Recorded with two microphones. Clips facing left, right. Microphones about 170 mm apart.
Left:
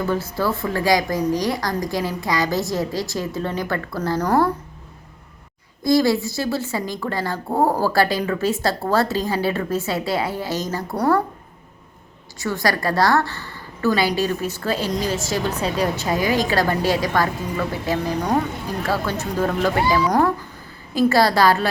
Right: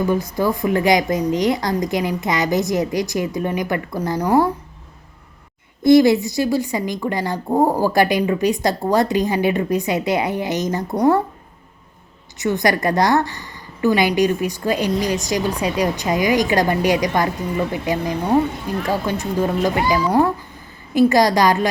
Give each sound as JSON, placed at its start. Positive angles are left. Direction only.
{"t": 0.0, "sound": "a woman's voice", "side_deg": -15}
{"t": 5.8, "sound": "a woman's voice", "side_deg": -20}
{"t": 12.4, "sound": "a woman's voice", "side_deg": -20}
{"t": 19.2, "sound": "a woman's voice", "side_deg": -15}